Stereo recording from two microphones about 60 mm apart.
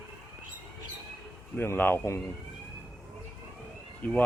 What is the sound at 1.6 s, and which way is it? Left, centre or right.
Speech, left.